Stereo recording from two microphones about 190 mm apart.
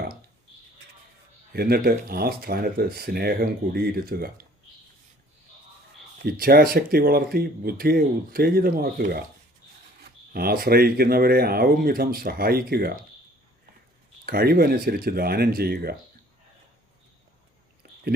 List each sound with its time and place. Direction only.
1.5 s speech: 55° right (ahead or behind)
6.2 s speech: 50° right (ahead or behind)
14.3 s speech: 50° right (ahead or behind)
17.8 s a sound: 55° right (ahead or behind)